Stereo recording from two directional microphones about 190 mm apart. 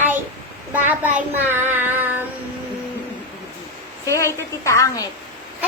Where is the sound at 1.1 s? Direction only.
10° right (ahead or behind).